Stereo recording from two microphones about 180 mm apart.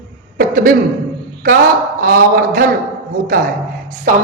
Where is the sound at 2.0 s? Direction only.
50° right (ahead or behind).